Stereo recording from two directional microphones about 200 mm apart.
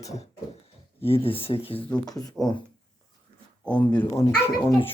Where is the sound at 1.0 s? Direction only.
30° left (ahead or behind).